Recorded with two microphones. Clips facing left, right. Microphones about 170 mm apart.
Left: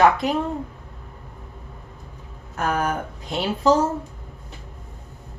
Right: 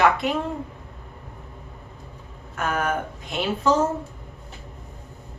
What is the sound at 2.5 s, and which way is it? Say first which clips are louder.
Speech: left 1 dB; 35° left (ahead or behind).